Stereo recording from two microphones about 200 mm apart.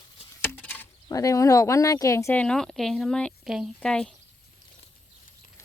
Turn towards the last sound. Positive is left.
turn(degrees=5)  # may be behind; listen again after turning